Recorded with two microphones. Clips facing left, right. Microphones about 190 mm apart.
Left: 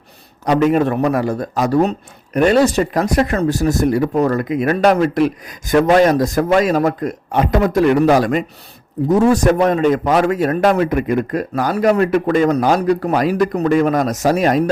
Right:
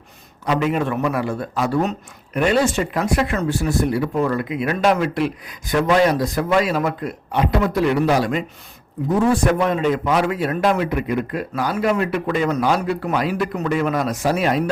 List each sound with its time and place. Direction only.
0.4 s a man's voice: 45° left (ahead or behind)